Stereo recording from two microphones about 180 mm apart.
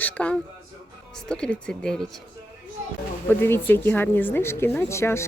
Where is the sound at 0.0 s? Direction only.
5° left (ahead or behind).